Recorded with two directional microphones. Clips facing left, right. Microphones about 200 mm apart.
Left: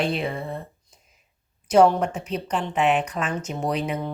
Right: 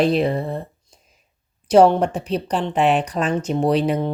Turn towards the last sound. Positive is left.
turn(degrees=-35)  # may be behind; listen again after turning